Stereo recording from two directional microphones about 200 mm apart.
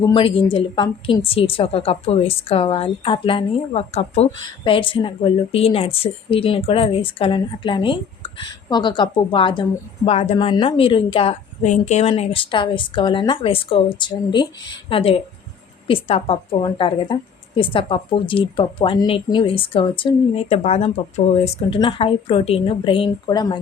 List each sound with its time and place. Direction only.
0.1 s a woman's voice: 25° left (ahead or behind)